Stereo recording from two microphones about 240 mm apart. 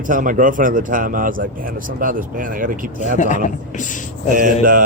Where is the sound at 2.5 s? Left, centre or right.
Right.